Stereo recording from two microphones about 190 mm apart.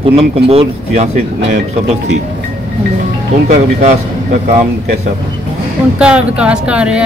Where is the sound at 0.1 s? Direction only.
30° right (ahead or behind).